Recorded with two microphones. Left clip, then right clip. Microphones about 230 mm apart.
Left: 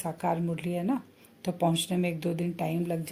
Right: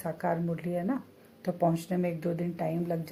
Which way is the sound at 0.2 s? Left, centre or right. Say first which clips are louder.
Left 2 dB; left.